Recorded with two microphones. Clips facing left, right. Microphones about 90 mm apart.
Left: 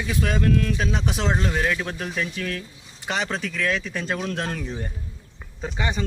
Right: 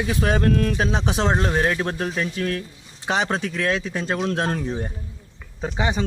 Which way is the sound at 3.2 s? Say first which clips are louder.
Even; 30° right (ahead or behind).